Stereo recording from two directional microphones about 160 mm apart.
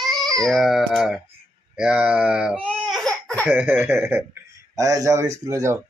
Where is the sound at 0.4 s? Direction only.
Centre (ahead or behind).